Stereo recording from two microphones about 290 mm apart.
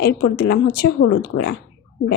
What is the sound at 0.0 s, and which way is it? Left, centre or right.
Speech, left.